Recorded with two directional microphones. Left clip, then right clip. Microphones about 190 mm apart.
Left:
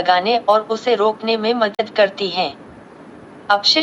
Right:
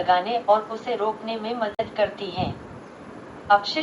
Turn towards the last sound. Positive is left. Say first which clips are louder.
# left 5 dB
turn(degrees=60)  # may be behind; listen again after turning